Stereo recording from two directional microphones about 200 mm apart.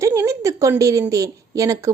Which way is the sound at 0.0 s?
15° right (ahead or behind).